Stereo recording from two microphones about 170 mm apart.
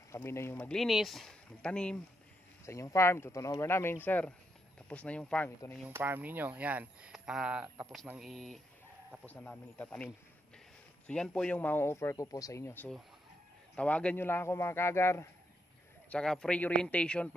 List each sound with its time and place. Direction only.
0.1 s speech: 15° left (ahead or behind)
2.6 s a man's voice: 15° left (ahead or behind)
5.9 s a man's voice: 10° right (ahead or behind); by 15.2 s 15° left (ahead or behind)
16.1 s a man's voice: 5° left (ahead or behind)